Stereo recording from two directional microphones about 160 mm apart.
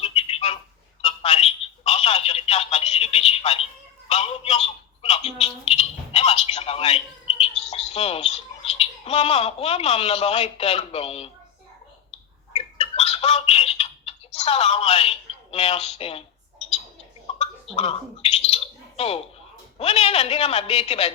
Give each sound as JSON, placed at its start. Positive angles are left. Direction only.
{"t": 0.0, "sound": "telephone", "side_deg": 40}
{"t": 5.0, "sound": "a sound", "side_deg": 40}
{"t": 12.5, "sound": "telephone", "side_deg": 40}
{"t": 15.5, "sound": "a man's voice", "side_deg": 40}
{"t": 17.7, "sound": "bird", "side_deg": 40}
{"t": 19.8, "sound": "a man's voice", "side_deg": 40}